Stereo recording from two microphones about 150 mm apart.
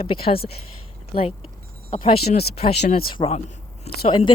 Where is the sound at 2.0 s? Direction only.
35° left (ahead or behind).